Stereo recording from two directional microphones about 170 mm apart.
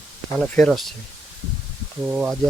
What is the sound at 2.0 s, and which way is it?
Speech, 5° right (ahead or behind).